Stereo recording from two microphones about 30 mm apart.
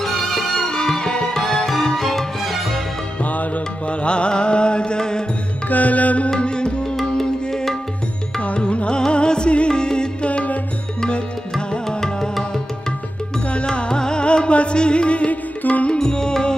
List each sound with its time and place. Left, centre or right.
0.0 s music: centre
0.7 s music: left
2.4 s music: centre
4.0 s music: left
5.7 s music: left
6.4 s music: left
7.2 s music: centre
8.5 s music: left
13.7 s music: left
15.9 s music: left